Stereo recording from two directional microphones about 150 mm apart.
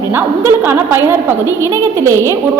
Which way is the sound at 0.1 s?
15° right (ahead or behind).